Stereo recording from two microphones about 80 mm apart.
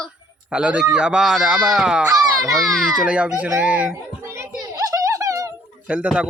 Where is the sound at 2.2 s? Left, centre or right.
Right.